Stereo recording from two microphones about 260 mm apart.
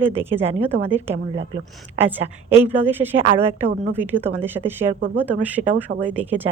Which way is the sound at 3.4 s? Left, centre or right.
Right.